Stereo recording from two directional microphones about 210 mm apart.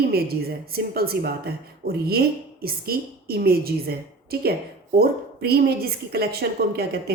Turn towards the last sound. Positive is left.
turn(degrees=-50)  # may be behind; listen again after turning